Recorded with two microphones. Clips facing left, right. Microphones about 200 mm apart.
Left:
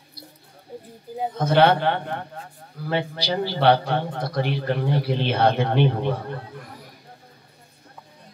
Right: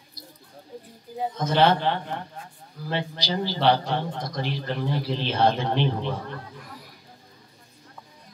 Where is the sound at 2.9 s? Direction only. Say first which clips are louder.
Left 4 dB; 60° left (ahead or behind).